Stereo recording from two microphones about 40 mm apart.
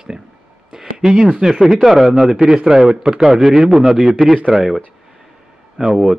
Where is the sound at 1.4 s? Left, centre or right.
Centre.